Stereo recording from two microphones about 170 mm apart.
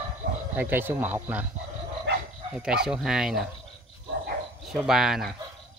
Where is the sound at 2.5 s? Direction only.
5° right (ahead or behind).